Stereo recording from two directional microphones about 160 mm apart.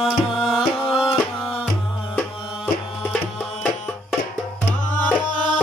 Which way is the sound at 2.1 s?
5° left (ahead or behind).